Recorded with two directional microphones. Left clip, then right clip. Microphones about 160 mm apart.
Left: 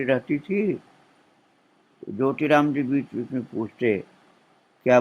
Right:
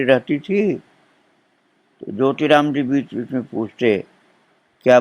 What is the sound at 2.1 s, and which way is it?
Speech, 20° right (ahead or behind).